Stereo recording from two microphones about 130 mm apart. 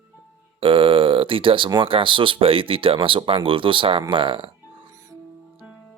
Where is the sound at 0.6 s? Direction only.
40° right (ahead or behind).